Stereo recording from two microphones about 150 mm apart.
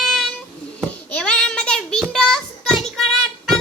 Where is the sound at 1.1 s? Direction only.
5° left (ahead or behind).